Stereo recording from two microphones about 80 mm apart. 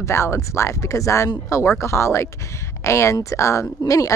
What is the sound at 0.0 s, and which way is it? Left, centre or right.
Speech, left.